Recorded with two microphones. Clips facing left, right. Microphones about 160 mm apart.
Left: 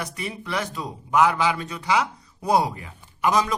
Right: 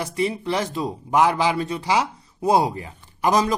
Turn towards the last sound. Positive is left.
turn(degrees=-35)  # may be behind; listen again after turning